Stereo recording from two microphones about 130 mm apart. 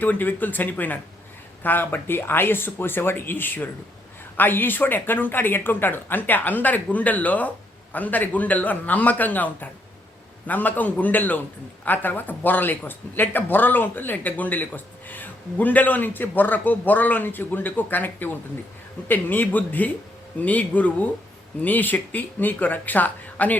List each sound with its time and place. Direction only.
0.0 s speech: 15° left (ahead or behind)